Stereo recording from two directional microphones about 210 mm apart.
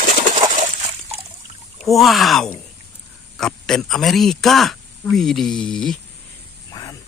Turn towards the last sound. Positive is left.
turn(degrees=5)  # may be behind; listen again after turning